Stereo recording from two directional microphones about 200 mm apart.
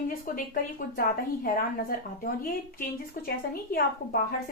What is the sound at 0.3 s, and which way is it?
Speech, 45° left (ahead or behind).